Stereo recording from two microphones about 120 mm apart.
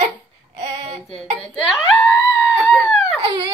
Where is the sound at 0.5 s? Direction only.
55° right (ahead or behind).